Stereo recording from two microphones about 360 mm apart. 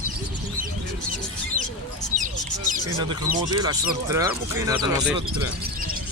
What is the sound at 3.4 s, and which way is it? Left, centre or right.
Speech, centre.